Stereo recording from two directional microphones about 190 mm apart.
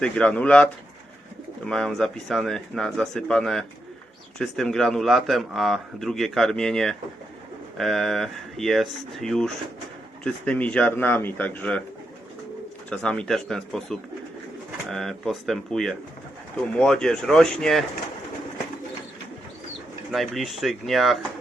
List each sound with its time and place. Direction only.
0.0 s a man's voice: 5° left (ahead or behind)
12.9 s a man's voice: 5° left (ahead or behind)
20.1 s a man's voice: centre (ahead or behind)